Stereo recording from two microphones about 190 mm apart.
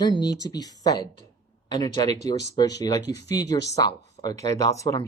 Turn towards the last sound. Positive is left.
turn(degrees=15)  # may be behind; listen again after turning